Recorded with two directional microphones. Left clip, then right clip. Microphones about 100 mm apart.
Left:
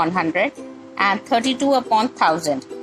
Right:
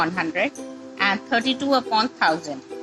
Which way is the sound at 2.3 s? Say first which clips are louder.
Left 7 dB; 55° left (ahead or behind).